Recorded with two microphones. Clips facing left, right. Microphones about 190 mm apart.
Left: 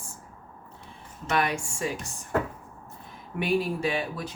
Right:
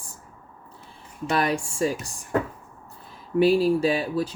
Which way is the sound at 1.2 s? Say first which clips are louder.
Right 3 dB; 35° right (ahead or behind).